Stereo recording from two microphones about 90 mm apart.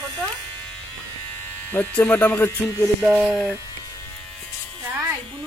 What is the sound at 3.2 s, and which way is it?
Speech, 5° right (ahead or behind).